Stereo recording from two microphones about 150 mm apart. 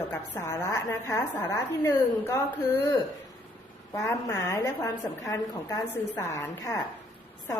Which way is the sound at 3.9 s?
20° left (ahead or behind).